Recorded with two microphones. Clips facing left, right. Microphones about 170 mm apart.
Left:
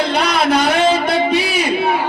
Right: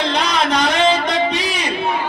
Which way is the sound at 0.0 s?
10° left (ahead or behind).